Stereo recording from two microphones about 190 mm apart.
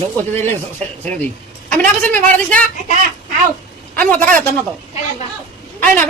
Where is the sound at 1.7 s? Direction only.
10° left (ahead or behind).